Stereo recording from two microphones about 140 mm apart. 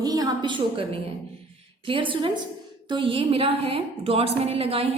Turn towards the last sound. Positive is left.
turn(degrees=-45)  # may be behind; listen again after turning